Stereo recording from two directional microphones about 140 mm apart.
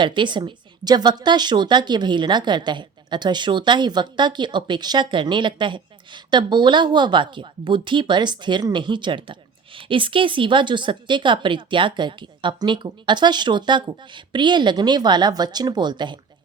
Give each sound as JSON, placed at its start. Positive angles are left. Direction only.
{"t": 0.0, "sound": "speech", "side_deg": -35}